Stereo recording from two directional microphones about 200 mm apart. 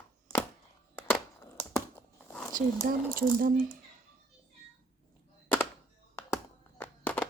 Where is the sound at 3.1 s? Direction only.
45° right (ahead or behind).